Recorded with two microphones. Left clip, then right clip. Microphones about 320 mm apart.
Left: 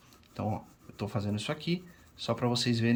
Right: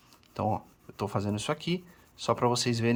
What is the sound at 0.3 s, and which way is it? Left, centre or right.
Speech, centre.